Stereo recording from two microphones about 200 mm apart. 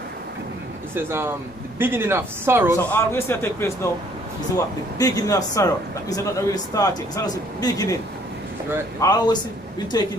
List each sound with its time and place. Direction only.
0.9 s speech: 10° right (ahead or behind)
2.8 s a man's voice: 10° left (ahead or behind)
4.9 s a man's voice: 20° left (ahead or behind)
9.0 s a man's voice: 20° left (ahead or behind)